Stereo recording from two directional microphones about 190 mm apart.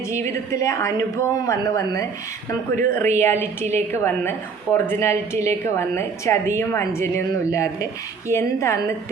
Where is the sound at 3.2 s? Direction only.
10° left (ahead or behind).